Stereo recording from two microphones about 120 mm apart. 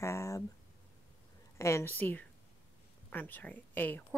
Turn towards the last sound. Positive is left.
turn(degrees=15)  # may be behind; listen again after turning